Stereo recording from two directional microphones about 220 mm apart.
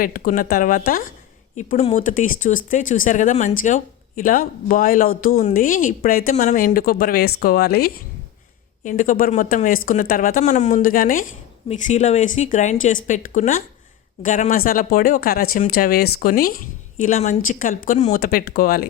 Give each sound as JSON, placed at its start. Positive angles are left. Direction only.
{"t": 0.0, "sound": "speech", "side_deg": 40}
{"t": 1.5, "sound": "speech", "side_deg": 30}